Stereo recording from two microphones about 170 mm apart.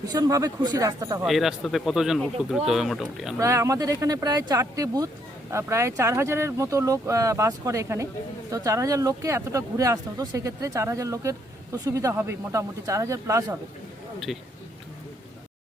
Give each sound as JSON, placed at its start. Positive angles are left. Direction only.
{"t": 0.1, "sound": "speech", "side_deg": -20}
{"t": 1.2, "sound": "speech", "side_deg": 0}
{"t": 3.3, "sound": "speech", "side_deg": -15}
{"t": 14.3, "sound": "speech", "side_deg": 0}